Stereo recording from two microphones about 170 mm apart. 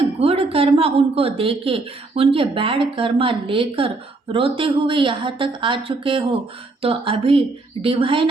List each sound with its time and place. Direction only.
0.2 s a woman's voice: 35° right (ahead or behind)